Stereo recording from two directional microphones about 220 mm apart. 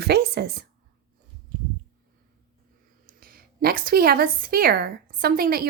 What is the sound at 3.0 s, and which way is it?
A woman's voice, 40° right (ahead or behind).